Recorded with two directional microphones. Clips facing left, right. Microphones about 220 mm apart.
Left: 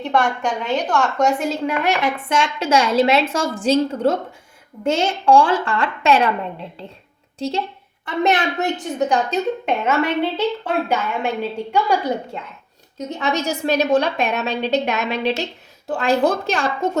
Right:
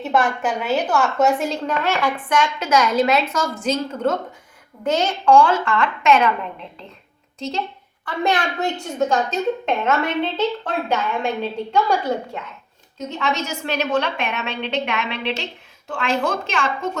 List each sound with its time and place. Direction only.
0.0 s a woman's voice: 5° right (ahead or behind)
1.6 s a woman's voice: 15° left (ahead or behind); by 6.3 s 30° left (ahead or behind)
7.3 s a woman's voice: 30° left (ahead or behind)
8.0 s a woman's voice: 20° left (ahead or behind)
13.1 s a woman's voice: 35° left (ahead or behind)